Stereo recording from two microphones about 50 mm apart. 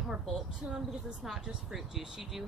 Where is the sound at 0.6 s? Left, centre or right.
Centre.